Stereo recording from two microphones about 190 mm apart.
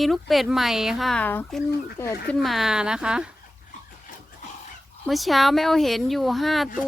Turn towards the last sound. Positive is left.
turn(degrees=0)  # may be behind; listen again after turning